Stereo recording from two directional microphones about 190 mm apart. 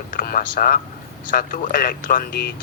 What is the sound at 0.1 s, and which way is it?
Speech, 45° left (ahead or behind).